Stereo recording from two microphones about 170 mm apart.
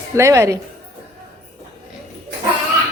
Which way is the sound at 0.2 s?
15° right (ahead or behind).